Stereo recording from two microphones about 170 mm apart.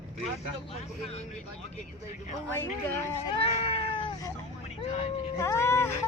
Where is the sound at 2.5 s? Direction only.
15° left (ahead or behind).